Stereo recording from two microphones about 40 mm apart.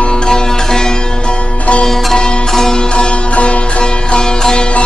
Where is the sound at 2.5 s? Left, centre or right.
Centre.